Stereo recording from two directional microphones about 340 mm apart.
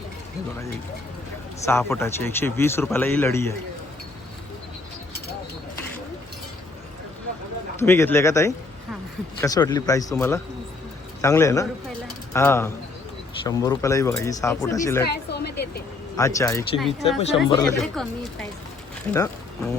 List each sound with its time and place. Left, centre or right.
1.6 s speech: centre
7.8 s speech: centre
15.1 s a woman's voice: left
16.1 s speech: centre